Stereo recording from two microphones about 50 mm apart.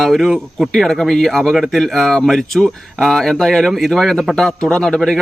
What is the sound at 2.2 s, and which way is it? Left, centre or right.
Speech, centre.